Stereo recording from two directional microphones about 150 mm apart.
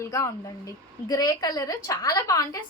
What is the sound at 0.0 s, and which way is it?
A woman's voice, 20° left (ahead or behind).